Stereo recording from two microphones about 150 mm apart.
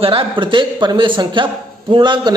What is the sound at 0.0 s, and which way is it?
A man's voice, 35° right (ahead or behind).